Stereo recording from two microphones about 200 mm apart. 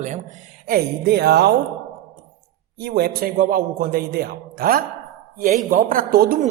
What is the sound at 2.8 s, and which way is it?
A man's voice, 50° right (ahead or behind).